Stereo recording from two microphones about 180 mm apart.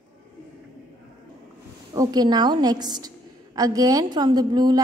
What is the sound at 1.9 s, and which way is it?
A woman's voice, 20° right (ahead or behind).